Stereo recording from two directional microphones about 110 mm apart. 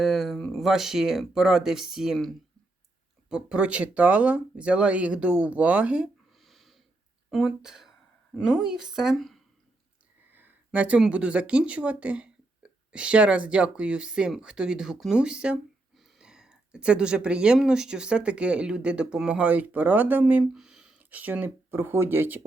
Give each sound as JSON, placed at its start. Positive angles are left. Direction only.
{"t": 0.0, "sound": "speech", "side_deg": 0}
{"t": 6.4, "sound": "snort", "side_deg": 0}
{"t": 7.3, "sound": "speech", "side_deg": -5}
{"t": 10.3, "sound": "speech", "side_deg": -15}
{"t": 20.5, "sound": "speech", "side_deg": -5}